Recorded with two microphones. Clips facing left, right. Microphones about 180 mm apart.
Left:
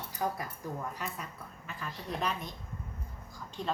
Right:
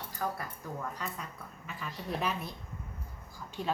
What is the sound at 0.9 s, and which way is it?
A woman's voice, 5° left (ahead or behind).